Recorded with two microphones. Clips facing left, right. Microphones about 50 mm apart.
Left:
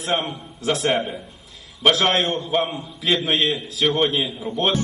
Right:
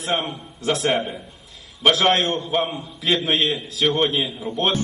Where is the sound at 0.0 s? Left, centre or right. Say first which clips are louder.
Left 1 dB; centre.